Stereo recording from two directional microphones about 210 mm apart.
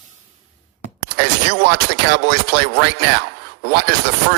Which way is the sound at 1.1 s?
50° right (ahead or behind).